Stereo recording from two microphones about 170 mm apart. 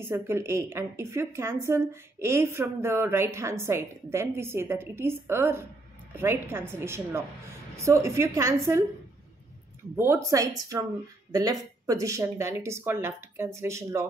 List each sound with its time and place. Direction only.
0.0 s a woman's voice: 15° right (ahead or behind)
9.9 s a woman's voice: 15° right (ahead or behind)